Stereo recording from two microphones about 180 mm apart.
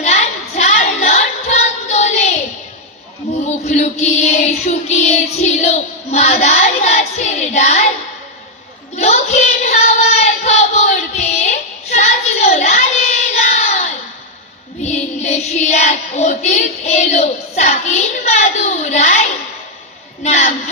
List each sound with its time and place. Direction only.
0.0 s music: 40° left (ahead or behind)
3.3 s a sound: 40° left (ahead or behind)
3.6 s child singing: 40° left (ahead or behind)
9.0 s child singing: 40° left (ahead or behind)
14.8 s child singing: 40° left (ahead or behind)
20.2 s a sound: 40° left (ahead or behind)